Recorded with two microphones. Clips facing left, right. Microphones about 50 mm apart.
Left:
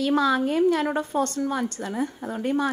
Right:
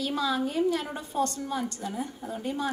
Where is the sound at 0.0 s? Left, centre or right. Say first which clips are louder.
Left 7 dB; left.